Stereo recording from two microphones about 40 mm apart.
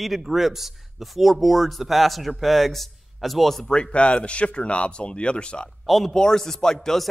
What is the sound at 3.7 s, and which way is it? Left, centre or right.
Speech, left.